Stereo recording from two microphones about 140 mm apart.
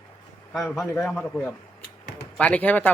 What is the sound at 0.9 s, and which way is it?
A man's voice, 15° left (ahead or behind).